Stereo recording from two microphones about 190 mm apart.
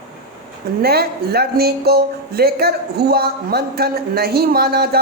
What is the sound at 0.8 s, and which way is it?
A woman's voice, 55° right (ahead or behind).